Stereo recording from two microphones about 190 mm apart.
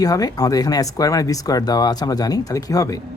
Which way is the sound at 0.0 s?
20° left (ahead or behind).